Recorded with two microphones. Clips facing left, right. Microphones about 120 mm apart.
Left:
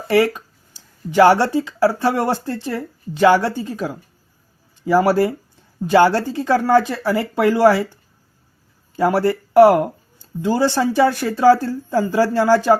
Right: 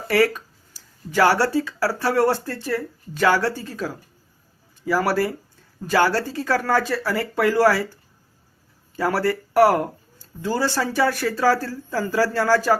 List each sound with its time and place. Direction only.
0.1 s speech: 20° left (ahead or behind)
9.0 s speech: 20° left (ahead or behind)